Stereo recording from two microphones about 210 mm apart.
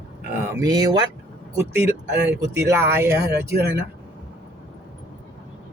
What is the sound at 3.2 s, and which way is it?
Speech, 50° right (ahead or behind).